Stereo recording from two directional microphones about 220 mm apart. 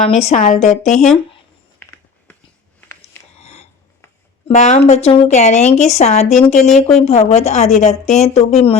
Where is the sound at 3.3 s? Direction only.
30° left (ahead or behind).